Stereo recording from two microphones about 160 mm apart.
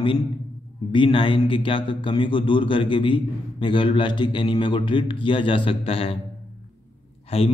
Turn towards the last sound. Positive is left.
turn(degrees=35)  # may be behind; listen again after turning